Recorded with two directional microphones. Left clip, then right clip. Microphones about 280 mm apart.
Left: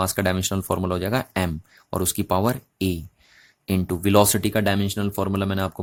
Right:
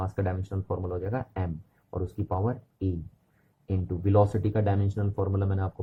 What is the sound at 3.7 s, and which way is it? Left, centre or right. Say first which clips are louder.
Speech: left 8 dB; left.